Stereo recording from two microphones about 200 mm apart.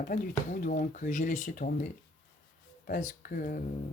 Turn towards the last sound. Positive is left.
turn(degrees=45)  # may be behind; listen again after turning